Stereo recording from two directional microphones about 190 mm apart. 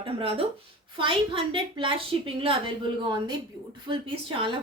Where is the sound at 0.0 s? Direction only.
30° right (ahead or behind).